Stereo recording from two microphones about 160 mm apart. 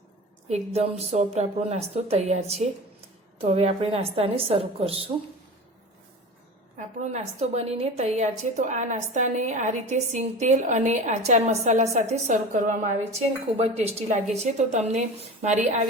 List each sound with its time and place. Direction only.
0.4 s a woman's voice: 45° right (ahead or behind)
6.7 s a woman's voice: 45° right (ahead or behind)